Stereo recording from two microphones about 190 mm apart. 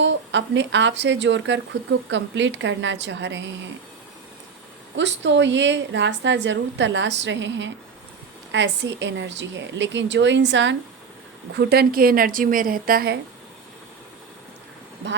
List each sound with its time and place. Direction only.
0.0 s speech: 70° right (ahead or behind)
4.9 s speech: 70° right (ahead or behind)
11.5 s a woman's voice: 55° right (ahead or behind)